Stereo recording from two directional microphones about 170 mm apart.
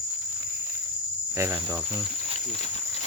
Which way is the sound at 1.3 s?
15° right (ahead or behind).